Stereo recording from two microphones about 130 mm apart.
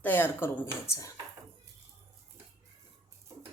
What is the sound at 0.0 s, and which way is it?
Speech, 15° left (ahead or behind).